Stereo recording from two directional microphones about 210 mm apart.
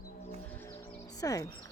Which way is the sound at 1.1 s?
15° left (ahead or behind).